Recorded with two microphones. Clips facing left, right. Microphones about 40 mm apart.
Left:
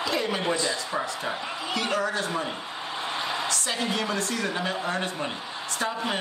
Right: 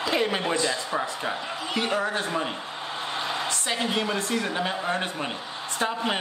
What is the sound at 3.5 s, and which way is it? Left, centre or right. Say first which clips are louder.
Speech: right 1 dB; right.